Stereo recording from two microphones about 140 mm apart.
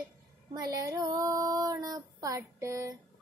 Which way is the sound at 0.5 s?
25° right (ahead or behind).